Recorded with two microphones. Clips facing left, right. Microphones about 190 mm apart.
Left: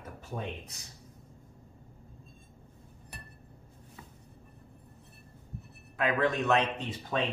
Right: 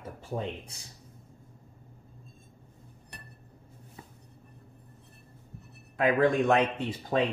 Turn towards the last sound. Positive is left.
turn(degrees=-10)  # may be behind; listen again after turning